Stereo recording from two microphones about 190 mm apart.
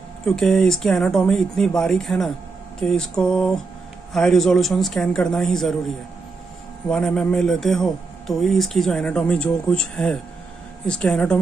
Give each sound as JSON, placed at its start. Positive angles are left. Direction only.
{"t": 0.2, "sound": "speech", "side_deg": 0}